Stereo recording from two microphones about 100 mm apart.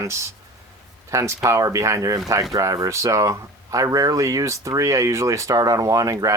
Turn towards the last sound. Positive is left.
turn(degrees=-35)  # may be behind; listen again after turning